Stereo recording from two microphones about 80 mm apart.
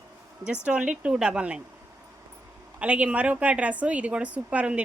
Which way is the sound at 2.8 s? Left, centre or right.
Centre.